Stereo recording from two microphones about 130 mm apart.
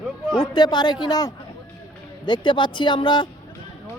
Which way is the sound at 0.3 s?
35° left (ahead or behind).